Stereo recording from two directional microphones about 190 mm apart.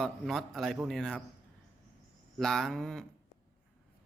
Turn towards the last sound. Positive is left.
turn(degrees=5)  # may be behind; listen again after turning